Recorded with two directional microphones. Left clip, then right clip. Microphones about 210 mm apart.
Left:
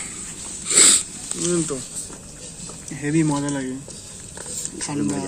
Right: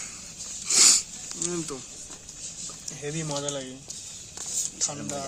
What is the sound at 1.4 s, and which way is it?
Speech, centre (ahead or behind).